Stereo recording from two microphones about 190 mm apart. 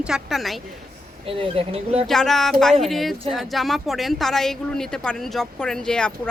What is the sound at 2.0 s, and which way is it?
A woman's voice, centre (ahead or behind).